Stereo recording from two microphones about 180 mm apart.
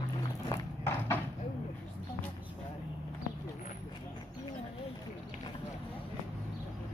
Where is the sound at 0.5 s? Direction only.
15° left (ahead or behind).